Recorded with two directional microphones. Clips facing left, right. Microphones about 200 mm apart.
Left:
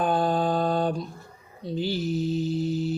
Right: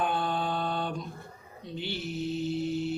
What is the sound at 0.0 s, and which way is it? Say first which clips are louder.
Mantra: left 6 dB; 40° left (ahead or behind).